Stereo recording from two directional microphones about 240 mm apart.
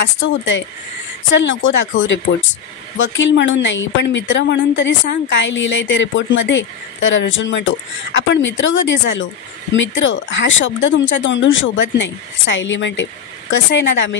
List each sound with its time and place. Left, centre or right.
0.0 s a woman's voice: left
3.2 s a woman's voice: left